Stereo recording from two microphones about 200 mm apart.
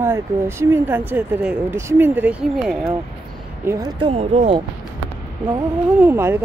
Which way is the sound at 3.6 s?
15° right (ahead or behind).